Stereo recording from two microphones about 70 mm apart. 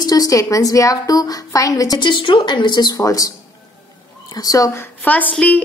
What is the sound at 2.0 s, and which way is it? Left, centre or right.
Speech, left.